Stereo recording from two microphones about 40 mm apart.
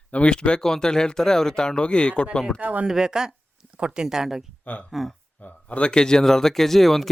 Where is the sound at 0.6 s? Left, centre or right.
Centre.